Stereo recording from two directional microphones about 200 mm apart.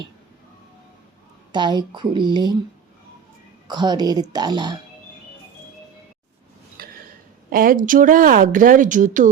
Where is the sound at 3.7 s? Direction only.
20° right (ahead or behind).